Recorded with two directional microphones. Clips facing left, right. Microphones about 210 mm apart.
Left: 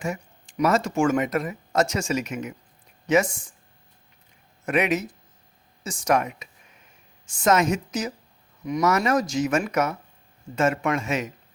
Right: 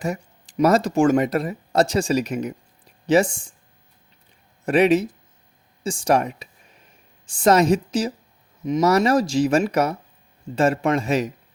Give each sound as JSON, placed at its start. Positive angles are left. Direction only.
{"t": 0.0, "sound": "speech", "side_deg": -35}
{"t": 4.6, "sound": "speech", "side_deg": -30}